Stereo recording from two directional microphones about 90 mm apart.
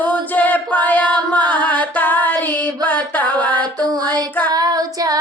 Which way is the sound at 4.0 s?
50° right (ahead or behind).